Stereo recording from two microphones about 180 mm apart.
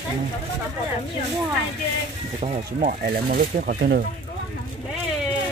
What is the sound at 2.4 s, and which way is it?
Speech, 40° right (ahead or behind).